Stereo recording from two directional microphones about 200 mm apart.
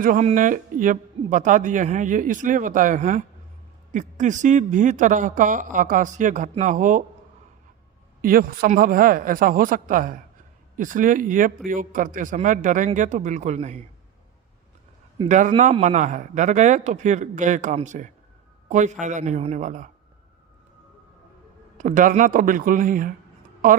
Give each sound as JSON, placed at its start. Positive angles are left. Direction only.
{"t": 0.0, "sound": "a man's voice", "side_deg": -45}
{"t": 8.2, "sound": "a man's voice", "side_deg": -45}
{"t": 15.3, "sound": "a man's voice", "side_deg": -35}
{"t": 21.8, "sound": "speech", "side_deg": -40}